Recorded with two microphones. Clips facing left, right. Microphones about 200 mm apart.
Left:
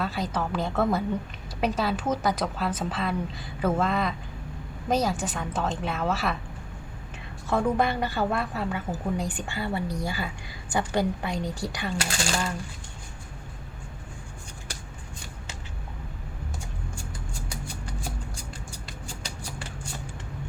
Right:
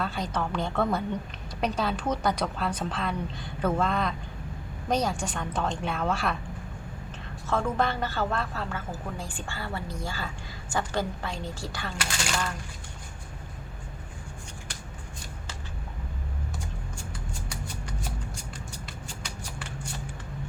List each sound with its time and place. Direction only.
0.0 s a woman's voice: 5° left (ahead or behind)
7.4 s a woman's voice: 15° left (ahead or behind)
11.9 s speech: 30° left (ahead or behind)